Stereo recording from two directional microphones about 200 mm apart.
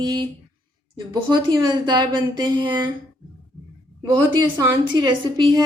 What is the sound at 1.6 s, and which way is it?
A woman's voice, 20° right (ahead or behind).